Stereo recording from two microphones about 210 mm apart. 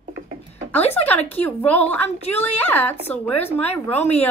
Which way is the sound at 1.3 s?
10° left (ahead or behind).